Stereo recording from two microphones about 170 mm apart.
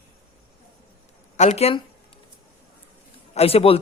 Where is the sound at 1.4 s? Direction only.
40° left (ahead or behind).